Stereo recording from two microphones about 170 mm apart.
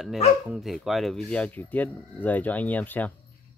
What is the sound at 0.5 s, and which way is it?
Speech, centre (ahead or behind).